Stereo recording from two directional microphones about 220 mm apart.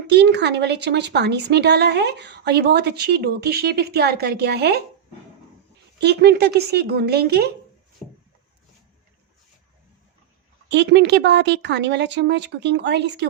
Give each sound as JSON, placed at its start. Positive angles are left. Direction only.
{"t": 0.1, "sound": "a woman's voice", "side_deg": -50}
{"t": 6.0, "sound": "a woman's voice", "side_deg": -50}
{"t": 10.7, "sound": "a woman's voice", "side_deg": -50}